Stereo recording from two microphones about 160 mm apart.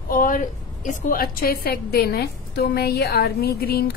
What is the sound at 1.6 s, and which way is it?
A woman's voice, 75° left (ahead or behind).